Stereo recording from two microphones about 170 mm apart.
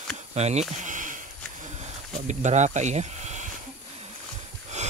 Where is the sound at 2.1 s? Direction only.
45° right (ahead or behind).